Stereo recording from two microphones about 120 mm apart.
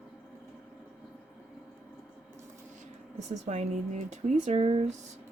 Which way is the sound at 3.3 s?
70° right (ahead or behind).